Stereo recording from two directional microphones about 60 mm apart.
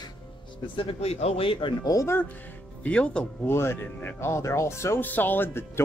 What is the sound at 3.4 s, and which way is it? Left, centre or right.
Speech, left.